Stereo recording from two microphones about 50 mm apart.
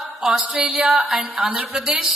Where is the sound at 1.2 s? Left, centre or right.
Centre.